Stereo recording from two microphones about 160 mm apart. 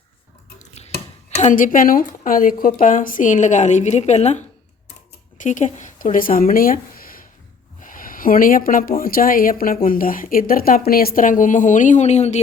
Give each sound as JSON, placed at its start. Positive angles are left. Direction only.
{"t": 0.6, "sound": "drip", "side_deg": 40}
{"t": 1.4, "sound": "a woman's voice", "side_deg": 50}